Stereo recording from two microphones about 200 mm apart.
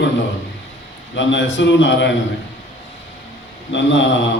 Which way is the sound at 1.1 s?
65° left (ahead or behind).